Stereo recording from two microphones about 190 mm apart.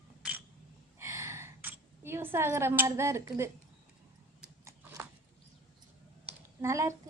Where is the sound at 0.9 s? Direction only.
15° right (ahead or behind).